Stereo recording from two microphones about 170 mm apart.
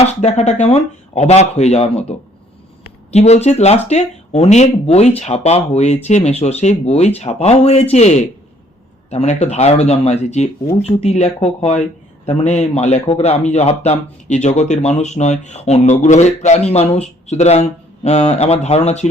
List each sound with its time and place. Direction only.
0.0 s a man's voice: 35° left (ahead or behind)